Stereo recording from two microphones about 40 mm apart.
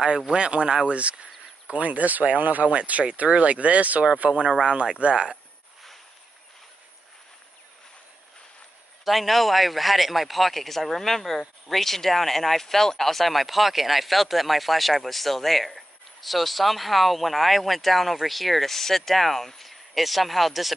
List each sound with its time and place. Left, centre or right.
0.3 s speech: right
4.3 s speech: centre
9.0 s a man's voice: centre